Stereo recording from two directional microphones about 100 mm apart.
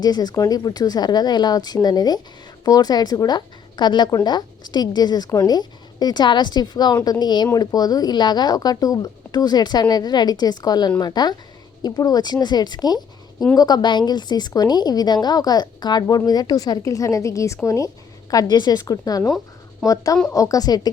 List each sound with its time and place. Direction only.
0.0 s a woman's voice: 45° left (ahead or behind)